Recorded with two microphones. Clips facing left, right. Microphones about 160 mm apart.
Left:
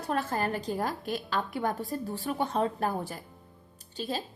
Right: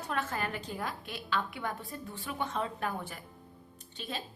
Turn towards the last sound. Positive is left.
turn(degrees=35)  # may be behind; listen again after turning